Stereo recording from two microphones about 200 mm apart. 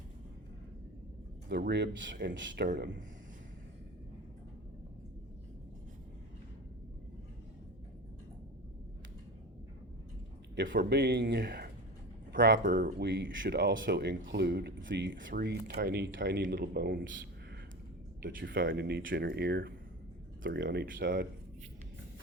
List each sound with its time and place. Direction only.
1.5 s speech: 55° right (ahead or behind)
2.6 s speech: 55° right (ahead or behind)
10.5 s speech: 60° right (ahead or behind)
18.2 s speech: 45° right (ahead or behind)
20.4 s speech: 60° right (ahead or behind)
20.8 s speech: 45° right (ahead or behind)